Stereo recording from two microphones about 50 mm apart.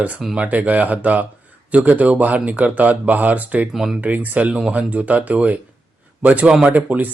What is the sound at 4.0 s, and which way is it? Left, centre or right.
Speech, right.